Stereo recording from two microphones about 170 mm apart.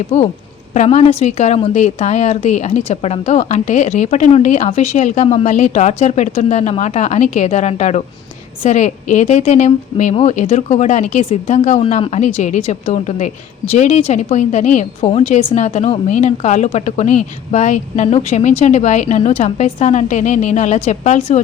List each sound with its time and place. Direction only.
0.1 s a woman's voice: 40° left (ahead or behind)